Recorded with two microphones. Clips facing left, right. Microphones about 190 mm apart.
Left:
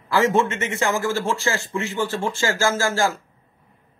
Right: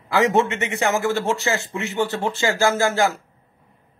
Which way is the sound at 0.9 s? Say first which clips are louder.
Right 2 dB; 20° right (ahead or behind).